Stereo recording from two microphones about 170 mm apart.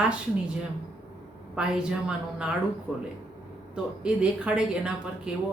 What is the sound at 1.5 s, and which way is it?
A woman's voice, 5° right (ahead or behind).